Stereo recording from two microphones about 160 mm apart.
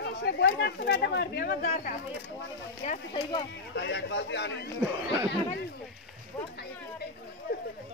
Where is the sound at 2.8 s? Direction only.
40° left (ahead or behind).